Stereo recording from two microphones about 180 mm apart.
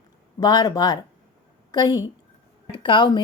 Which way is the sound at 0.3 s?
20° left (ahead or behind).